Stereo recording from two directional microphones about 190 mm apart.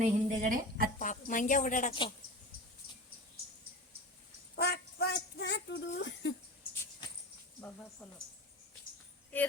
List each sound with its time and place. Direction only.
0.0 s speech: 40° right (ahead or behind)
0.9 s a woman's voice: 40° left (ahead or behind)
1.9 s a woman's voice: 25° left (ahead or behind)
4.5 s a sound: 55° left (ahead or behind)